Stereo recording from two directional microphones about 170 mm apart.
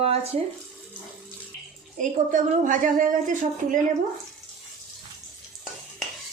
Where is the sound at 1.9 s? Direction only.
50° right (ahead or behind).